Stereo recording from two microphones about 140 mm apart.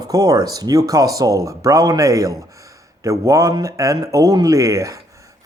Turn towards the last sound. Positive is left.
turn(degrees=-25)  # may be behind; listen again after turning